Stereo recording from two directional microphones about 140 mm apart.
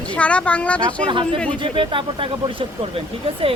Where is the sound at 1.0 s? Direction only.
35° right (ahead or behind).